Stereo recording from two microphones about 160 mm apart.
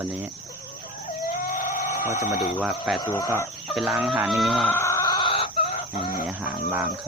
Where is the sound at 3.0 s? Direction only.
20° left (ahead or behind).